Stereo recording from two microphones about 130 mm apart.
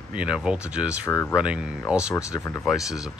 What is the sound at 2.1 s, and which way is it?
Speech, 25° left (ahead or behind).